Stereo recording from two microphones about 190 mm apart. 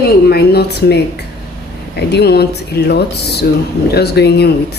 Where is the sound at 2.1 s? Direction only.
60° left (ahead or behind).